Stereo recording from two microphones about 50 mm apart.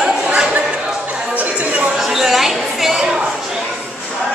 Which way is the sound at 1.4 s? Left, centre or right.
Right.